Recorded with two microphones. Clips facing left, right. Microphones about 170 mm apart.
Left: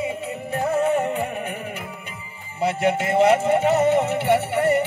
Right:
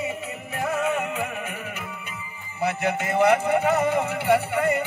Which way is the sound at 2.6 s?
30° left (ahead or behind).